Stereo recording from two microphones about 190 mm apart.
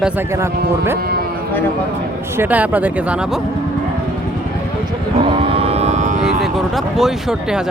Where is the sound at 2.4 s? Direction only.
10° right (ahead or behind).